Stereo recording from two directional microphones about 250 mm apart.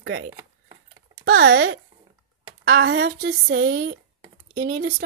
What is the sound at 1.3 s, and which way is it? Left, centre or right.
Speech, right.